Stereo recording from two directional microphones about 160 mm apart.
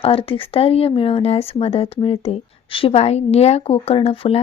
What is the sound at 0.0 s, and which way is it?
Speech, 35° left (ahead or behind).